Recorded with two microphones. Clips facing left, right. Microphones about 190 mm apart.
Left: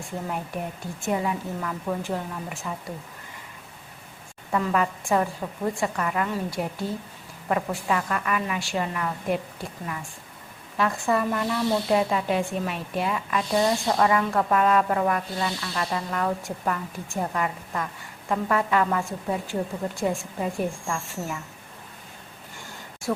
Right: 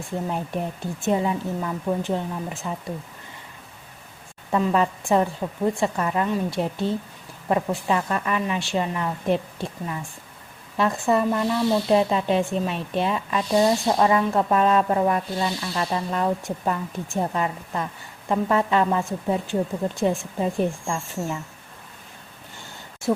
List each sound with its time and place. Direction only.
0.3 s speech: 30° right (ahead or behind)
4.5 s speech: 25° right (ahead or behind)
5.8 s speech: 25° right (ahead or behind)
23.1 s speech: 20° right (ahead or behind)